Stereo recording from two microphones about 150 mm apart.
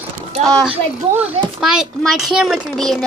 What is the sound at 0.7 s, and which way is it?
A child's voice, 10° right (ahead or behind).